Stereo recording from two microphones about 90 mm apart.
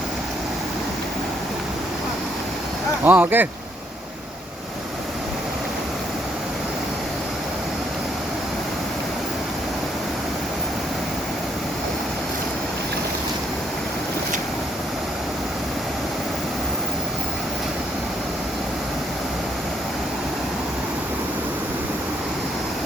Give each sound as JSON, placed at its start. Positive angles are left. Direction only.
{"t": 3.0, "sound": "speech", "side_deg": -20}